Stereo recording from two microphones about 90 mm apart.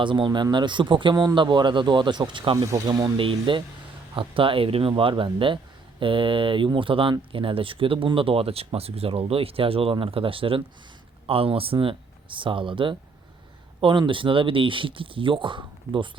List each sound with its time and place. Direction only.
0.0 s speech: 65° right (ahead or behind)
2.7 s speech: 50° right (ahead or behind)
3.2 s speech: 70° right (ahead or behind)
14.1 s speech: 70° right (ahead or behind)